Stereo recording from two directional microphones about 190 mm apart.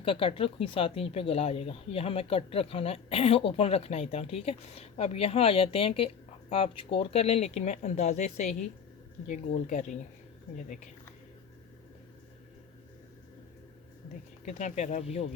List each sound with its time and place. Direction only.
0.0 s speech: 30° left (ahead or behind)
14.4 s speech: 40° left (ahead or behind)